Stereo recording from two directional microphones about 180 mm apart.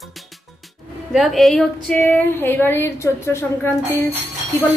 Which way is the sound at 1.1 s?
Centre (ahead or behind).